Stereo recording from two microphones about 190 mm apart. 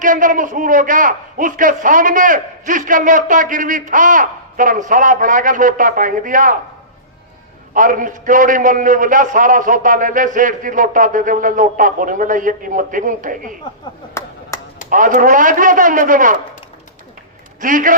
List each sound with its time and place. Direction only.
0.0 s a man's voice: 45° right (ahead or behind)
7.7 s a man's voice: 45° right (ahead or behind)
14.1 s a sound: 15° left (ahead or behind)
14.8 s a man's voice: 45° right (ahead or behind)
17.6 s a man's voice: 45° right (ahead or behind)